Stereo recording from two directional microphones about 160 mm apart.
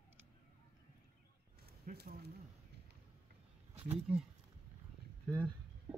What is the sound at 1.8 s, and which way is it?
Speech, 80° right.